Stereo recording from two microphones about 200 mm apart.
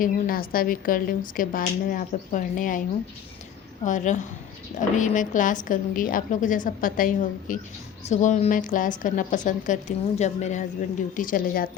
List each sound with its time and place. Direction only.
0.0 s speech: 45° left (ahead or behind)
3.8 s a woman's voice: 40° left (ahead or behind)